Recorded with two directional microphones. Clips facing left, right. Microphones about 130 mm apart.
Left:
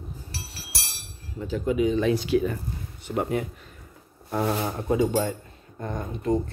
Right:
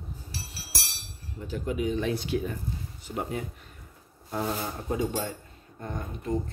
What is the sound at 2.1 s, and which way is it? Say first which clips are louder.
Speech: left 6 dB; 90° left.